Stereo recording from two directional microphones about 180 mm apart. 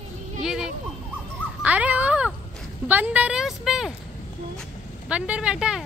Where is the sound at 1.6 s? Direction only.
10° right (ahead or behind).